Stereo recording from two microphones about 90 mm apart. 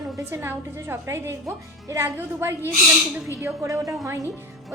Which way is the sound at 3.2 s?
35° right (ahead or behind).